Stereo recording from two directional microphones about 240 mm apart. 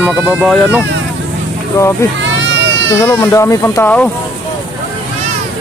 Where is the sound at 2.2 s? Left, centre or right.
Right.